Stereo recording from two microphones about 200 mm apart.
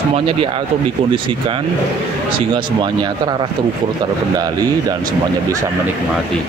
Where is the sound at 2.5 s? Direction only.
25° right (ahead or behind).